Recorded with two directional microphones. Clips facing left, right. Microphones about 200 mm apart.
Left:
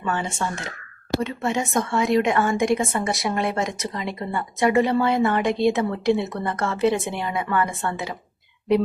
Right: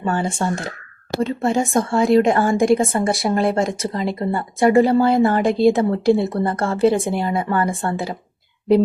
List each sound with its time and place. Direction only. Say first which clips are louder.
0.0 s a woman's voice: right 5 dB; 35° right (ahead or behind)